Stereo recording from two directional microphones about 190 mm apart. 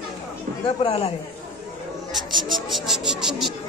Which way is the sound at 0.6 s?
30° left (ahead or behind).